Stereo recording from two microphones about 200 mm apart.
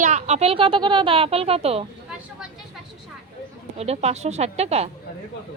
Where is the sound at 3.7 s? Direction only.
30° right (ahead or behind).